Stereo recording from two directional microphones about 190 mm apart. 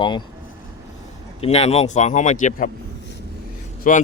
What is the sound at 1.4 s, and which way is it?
Speech, 35° left (ahead or behind).